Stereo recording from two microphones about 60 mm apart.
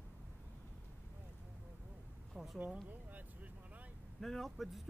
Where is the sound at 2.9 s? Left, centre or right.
Right.